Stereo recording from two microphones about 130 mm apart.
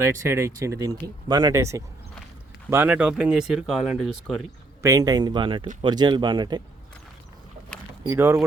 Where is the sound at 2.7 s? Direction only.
15° right (ahead or behind).